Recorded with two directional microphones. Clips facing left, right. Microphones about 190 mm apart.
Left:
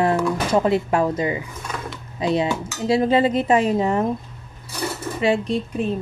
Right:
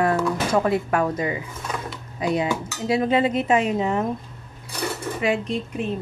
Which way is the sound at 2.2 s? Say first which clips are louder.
Left 2 dB; 25° left (ahead or behind).